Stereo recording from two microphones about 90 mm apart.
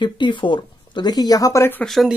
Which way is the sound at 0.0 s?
60° left (ahead or behind).